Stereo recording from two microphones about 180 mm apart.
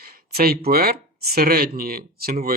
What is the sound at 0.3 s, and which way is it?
Speech, 60° right (ahead or behind).